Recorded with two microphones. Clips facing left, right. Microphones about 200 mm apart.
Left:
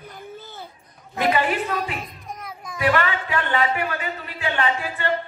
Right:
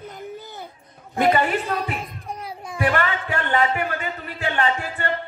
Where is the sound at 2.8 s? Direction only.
45° right (ahead or behind).